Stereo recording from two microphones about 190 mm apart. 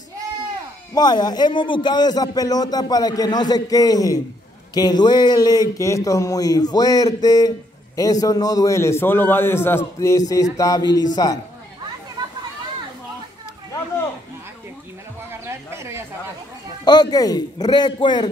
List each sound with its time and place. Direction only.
0.9 s a man's voice: 20° left (ahead or behind)
15.4 s a sound: 15° right (ahead or behind)
16.8 s a man's voice: 20° left (ahead or behind)